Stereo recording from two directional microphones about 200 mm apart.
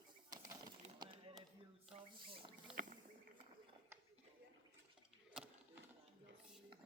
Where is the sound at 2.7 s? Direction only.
5° right (ahead or behind).